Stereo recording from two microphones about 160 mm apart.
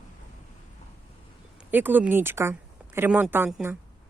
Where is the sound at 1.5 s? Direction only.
10° right (ahead or behind).